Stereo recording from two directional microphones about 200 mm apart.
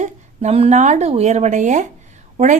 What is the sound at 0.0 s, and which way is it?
A woman's voice, 35° right (ahead or behind).